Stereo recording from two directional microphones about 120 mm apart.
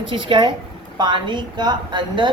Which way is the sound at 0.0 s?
45° right (ahead or behind).